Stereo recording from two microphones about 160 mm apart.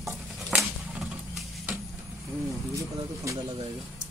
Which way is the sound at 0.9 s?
5° right (ahead or behind).